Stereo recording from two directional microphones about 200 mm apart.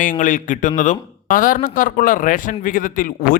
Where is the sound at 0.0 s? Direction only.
40° left (ahead or behind).